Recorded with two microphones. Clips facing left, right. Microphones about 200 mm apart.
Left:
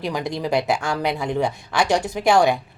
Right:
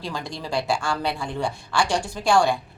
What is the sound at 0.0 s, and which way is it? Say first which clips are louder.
Speech: left 7 dB; 20° left (ahead or behind).